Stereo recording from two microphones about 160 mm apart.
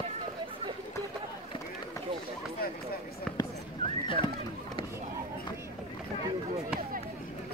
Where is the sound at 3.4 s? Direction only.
30° left (ahead or behind).